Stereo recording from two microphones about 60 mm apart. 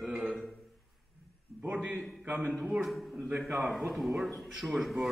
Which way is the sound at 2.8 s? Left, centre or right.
Centre.